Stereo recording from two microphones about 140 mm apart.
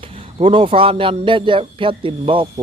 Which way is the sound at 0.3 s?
40° right (ahead or behind).